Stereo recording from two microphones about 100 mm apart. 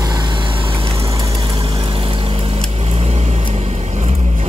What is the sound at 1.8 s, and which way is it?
Vehicle, 65° right (ahead or behind).